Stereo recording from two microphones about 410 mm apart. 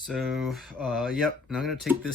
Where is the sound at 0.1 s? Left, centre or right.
Centre.